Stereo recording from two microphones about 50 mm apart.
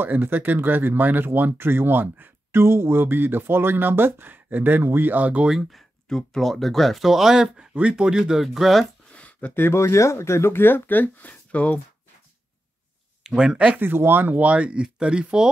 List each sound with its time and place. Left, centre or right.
0.0 s speech: right
5.1 s speech: right
5.5 s speech: centre
6.0 s speech: centre
7.7 s speech: right
8.4 s speech: centre
9.1 s a sound: left
9.5 s speech: left
9.8 s speech: left
13.2 s speech: centre
13.7 s speech: right
14.4 s speech: right